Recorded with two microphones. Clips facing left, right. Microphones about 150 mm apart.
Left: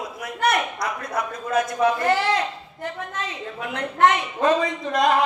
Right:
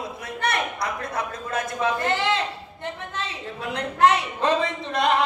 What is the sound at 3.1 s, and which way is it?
A woman's voice, 35° right (ahead or behind).